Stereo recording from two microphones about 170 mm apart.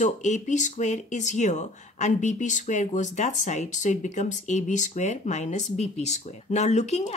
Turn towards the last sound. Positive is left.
turn(degrees=40)  # may be behind; listen again after turning